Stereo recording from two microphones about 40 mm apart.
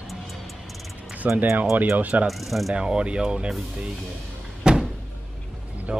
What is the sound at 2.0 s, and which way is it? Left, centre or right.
Speech, right.